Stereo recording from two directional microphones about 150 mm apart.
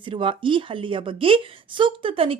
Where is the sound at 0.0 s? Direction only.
35° right (ahead or behind).